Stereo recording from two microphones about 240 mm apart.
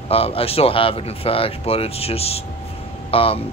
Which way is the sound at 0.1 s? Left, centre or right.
Left.